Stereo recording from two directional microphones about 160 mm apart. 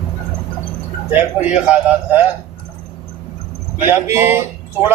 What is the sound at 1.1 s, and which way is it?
A man's voice, 10° right (ahead or behind).